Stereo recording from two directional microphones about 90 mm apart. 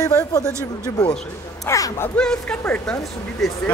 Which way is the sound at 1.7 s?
35° left (ahead or behind).